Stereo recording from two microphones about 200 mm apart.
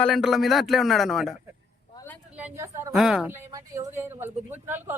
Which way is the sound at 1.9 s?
10° left (ahead or behind).